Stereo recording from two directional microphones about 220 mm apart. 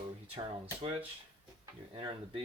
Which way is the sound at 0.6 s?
25° right (ahead or behind).